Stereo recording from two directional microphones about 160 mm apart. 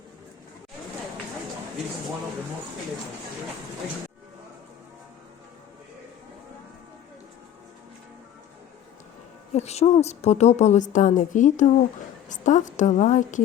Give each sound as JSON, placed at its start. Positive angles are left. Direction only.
{"t": 9.5, "sound": "a woman's voice", "side_deg": 45}